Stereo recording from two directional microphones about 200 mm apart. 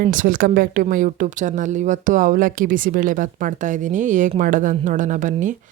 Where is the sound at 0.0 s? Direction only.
45° right (ahead or behind).